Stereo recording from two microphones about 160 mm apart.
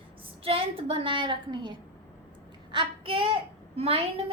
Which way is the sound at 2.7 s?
35° right (ahead or behind).